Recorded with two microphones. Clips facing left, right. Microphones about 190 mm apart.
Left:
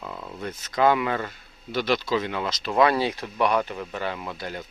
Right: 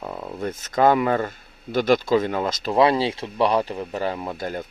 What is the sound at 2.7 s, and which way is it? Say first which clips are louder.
Speech: right 2 dB; 30° right (ahead or behind).